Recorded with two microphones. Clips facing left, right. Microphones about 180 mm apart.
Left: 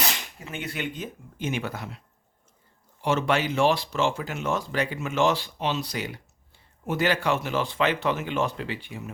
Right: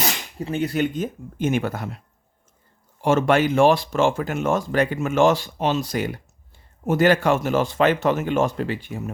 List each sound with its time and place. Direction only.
0.0 s speech: 35° right (ahead or behind)
3.0 s speech: 50° right (ahead or behind)